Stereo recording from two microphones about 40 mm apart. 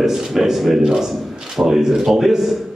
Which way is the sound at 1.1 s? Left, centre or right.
Centre.